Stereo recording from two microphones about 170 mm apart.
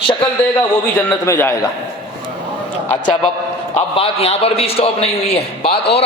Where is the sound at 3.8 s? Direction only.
35° left (ahead or behind).